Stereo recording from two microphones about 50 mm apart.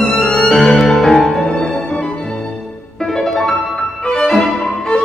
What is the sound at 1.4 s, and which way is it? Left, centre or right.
Music, centre.